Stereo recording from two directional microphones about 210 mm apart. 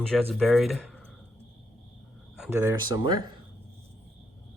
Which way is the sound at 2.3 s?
5° right (ahead or behind).